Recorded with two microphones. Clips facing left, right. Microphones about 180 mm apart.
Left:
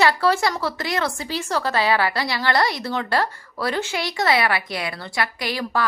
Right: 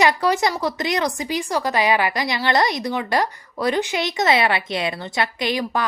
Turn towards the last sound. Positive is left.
turn(degrees=-20)  # may be behind; listen again after turning